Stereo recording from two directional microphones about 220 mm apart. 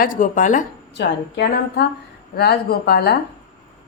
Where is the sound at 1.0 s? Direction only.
50° left (ahead or behind).